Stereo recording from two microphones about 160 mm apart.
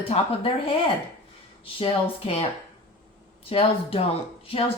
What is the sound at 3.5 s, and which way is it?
Speech, 35° left (ahead or behind).